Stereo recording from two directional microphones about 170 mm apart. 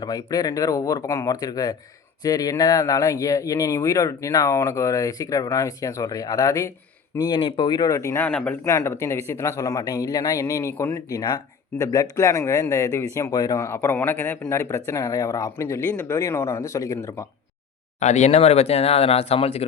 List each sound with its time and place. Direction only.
0.0 s speech: 20° left (ahead or behind)
18.0 s speech: 40° left (ahead or behind)